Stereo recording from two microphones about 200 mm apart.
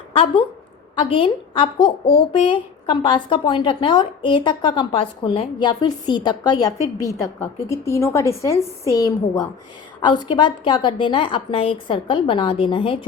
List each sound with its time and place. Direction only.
0.9 s a woman's voice: 25° left (ahead or behind)